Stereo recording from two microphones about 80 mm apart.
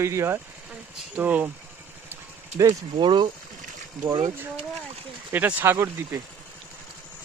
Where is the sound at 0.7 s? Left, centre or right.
Centre.